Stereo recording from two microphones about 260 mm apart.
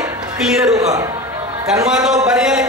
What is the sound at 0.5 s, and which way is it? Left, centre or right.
Speech, centre.